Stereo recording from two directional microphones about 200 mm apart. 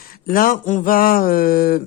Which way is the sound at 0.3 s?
45° left (ahead or behind).